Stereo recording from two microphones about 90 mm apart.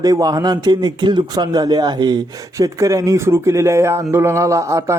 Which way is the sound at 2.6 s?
40° right (ahead or behind).